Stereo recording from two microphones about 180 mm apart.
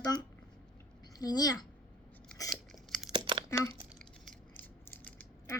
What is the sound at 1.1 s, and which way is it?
Speech, 20° left (ahead or behind).